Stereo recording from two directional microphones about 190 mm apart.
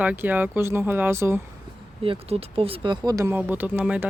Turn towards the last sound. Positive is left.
turn(degrees=-5)  # may be behind; listen again after turning